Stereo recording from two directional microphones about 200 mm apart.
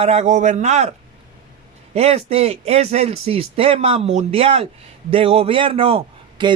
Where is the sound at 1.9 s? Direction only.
30° right (ahead or behind).